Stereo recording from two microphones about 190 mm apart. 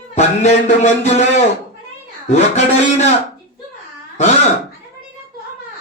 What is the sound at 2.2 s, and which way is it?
Speech, 40° left (ahead or behind).